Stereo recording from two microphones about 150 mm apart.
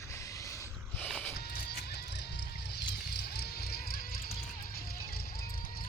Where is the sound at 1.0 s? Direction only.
5° left (ahead or behind).